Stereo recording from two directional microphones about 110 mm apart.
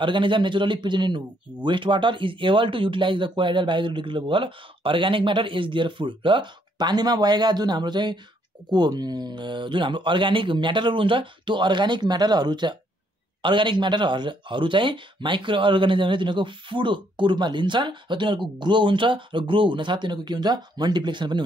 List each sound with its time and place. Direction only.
0.0 s speech: 50° right (ahead or behind)